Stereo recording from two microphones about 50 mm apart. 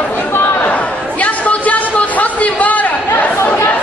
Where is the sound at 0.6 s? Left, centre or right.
Left.